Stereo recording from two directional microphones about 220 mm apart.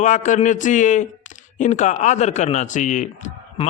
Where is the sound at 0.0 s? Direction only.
35° left (ahead or behind).